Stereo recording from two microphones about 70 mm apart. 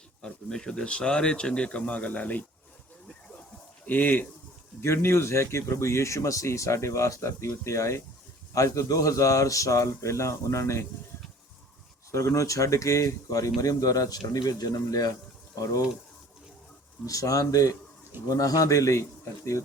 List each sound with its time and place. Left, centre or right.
0.2 s speech: centre
3.8 s speech: left
4.8 s speech: left
12.1 s speech: left
17.1 s speech: left